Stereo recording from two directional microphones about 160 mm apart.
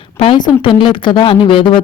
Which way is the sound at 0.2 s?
30° left (ahead or behind).